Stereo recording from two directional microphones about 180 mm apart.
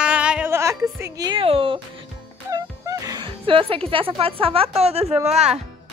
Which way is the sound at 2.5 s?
20° right (ahead or behind).